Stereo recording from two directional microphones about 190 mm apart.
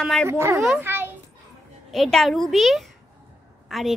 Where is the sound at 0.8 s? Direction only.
10° right (ahead or behind).